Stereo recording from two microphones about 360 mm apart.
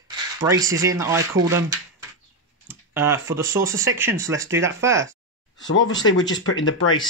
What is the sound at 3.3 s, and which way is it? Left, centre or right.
Speech, centre.